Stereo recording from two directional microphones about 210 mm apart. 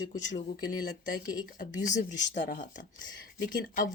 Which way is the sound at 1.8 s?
35° left (ahead or behind).